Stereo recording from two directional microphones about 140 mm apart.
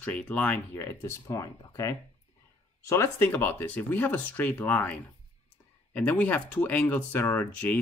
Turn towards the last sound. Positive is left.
turn(degrees=10)  # may be behind; listen again after turning